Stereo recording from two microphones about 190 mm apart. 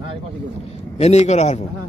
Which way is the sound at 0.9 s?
35° left (ahead or behind).